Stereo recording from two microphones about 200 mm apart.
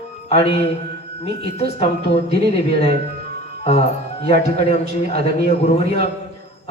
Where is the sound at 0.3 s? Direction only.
30° left (ahead or behind).